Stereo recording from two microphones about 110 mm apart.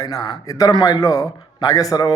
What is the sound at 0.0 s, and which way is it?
A man's voice, 35° left (ahead or behind).